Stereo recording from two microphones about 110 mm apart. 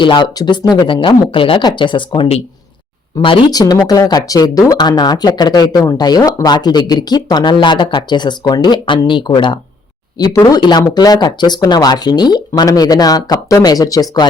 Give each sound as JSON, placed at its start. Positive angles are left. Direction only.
{"t": 0.0, "sound": "speech", "side_deg": 45}
{"t": 3.5, "sound": "speech", "side_deg": 35}